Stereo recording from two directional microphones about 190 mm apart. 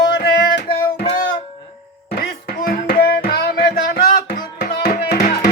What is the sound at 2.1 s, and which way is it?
Music, 55° left (ahead or behind).